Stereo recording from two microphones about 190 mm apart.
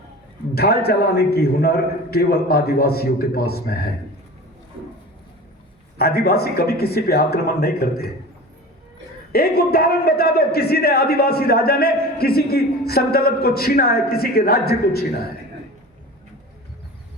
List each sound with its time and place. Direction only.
0.5 s a man's voice: 55° left (ahead or behind)
6.0 s a man's voice: 55° left (ahead or behind)
9.3 s a man's voice: 55° left (ahead or behind)